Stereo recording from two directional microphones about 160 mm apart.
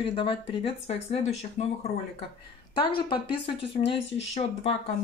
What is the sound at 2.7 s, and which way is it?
Speech, 35° left (ahead or behind).